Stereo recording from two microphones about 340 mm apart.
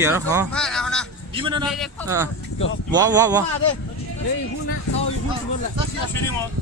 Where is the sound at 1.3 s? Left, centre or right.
Centre.